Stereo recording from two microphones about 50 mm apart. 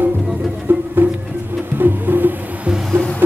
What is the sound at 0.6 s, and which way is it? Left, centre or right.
Insect, right.